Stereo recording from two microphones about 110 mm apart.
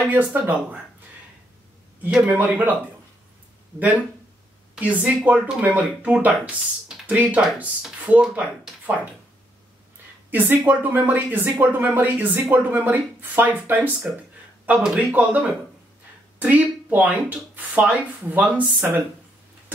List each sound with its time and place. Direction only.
0.0 s speech: 15° right (ahead or behind)
2.0 s speech: 10° right (ahead or behind)
4.7 s speech: 15° right (ahead or behind)
10.3 s speech: 15° right (ahead or behind)
15.0 s speech: 15° right (ahead or behind)